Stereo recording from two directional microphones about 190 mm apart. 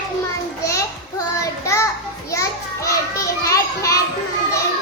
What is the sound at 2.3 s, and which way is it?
Children playing, 15° left (ahead or behind).